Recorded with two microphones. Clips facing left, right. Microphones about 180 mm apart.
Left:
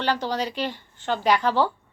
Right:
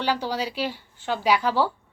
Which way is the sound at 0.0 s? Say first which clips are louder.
Left 1 dB; 10° right (ahead or behind).